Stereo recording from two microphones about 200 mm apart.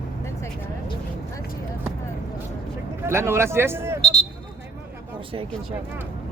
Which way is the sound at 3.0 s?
15° right (ahead or behind).